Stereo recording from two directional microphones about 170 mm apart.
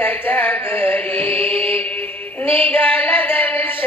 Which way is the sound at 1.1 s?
35° right (ahead or behind).